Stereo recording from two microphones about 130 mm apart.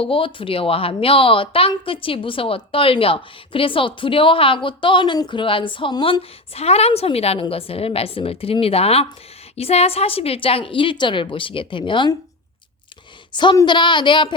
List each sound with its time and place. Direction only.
0.0 s a woman's voice: 45° left (ahead or behind)
13.3 s speech: 35° left (ahead or behind)